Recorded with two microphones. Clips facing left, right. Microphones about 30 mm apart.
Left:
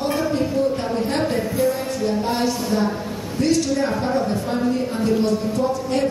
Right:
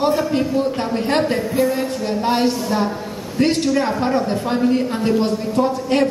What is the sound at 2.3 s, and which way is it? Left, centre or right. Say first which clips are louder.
A woman's voice: right 3 dB; right.